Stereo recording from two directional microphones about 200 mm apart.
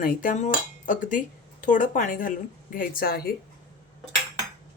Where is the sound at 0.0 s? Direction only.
40° left (ahead or behind).